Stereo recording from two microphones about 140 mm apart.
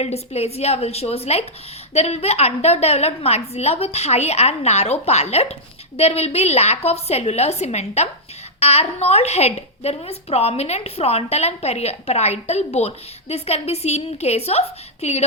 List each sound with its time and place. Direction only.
0.0 s a woman's voice: 50° left (ahead or behind)